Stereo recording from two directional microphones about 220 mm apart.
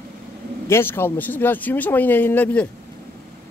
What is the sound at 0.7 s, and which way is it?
A man's voice, 10° left (ahead or behind).